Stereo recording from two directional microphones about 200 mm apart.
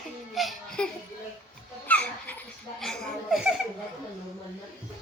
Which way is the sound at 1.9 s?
10° left (ahead or behind).